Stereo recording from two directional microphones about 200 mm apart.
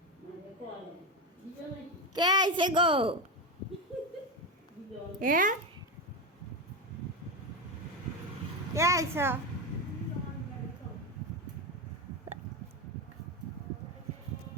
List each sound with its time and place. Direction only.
2.1 s a woman's voice: 20° right (ahead or behind)
5.2 s a woman's voice: 45° right (ahead or behind)
8.7 s a child's voice: 15° right (ahead or behind)